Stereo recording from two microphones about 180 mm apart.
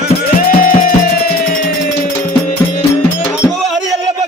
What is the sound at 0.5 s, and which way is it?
Music, 50° left (ahead or behind).